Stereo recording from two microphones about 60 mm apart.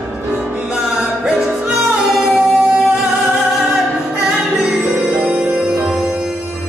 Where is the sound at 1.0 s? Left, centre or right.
Centre.